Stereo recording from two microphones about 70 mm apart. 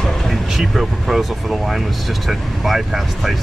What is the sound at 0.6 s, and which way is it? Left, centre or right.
Vehicle, centre.